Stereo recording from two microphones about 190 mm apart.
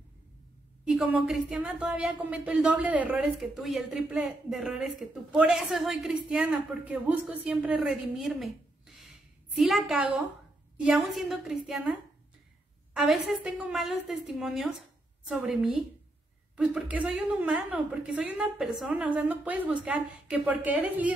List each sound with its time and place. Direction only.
0.8 s a woman's voice: 5° right (ahead or behind)